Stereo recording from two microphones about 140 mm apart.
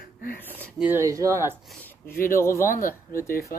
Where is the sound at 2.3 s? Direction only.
20° left (ahead or behind).